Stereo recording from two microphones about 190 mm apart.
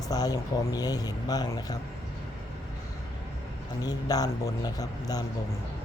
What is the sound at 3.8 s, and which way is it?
Speech, 20° left (ahead or behind).